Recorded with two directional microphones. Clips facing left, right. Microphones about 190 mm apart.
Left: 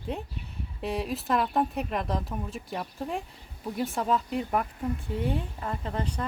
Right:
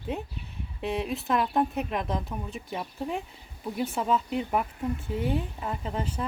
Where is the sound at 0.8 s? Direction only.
Centre (ahead or behind).